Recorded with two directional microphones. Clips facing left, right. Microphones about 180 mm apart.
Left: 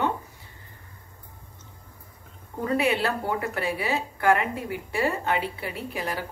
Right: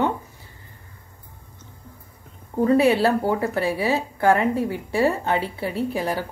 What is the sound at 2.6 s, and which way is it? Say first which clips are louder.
Speech: right 7 dB; 35° right (ahead or behind).